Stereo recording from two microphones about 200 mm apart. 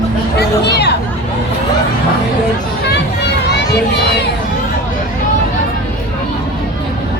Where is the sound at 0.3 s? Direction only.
55° left (ahead or behind).